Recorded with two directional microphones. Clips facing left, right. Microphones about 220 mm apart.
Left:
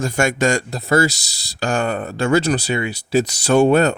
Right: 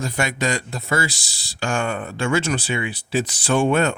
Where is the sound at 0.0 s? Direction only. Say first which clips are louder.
Left 6 dB; 45° left (ahead or behind).